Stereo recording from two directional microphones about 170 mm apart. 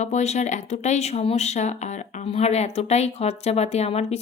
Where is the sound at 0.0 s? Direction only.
40° left (ahead or behind).